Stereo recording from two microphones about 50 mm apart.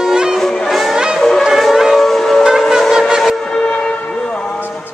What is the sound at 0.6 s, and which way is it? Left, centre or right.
Music, centre.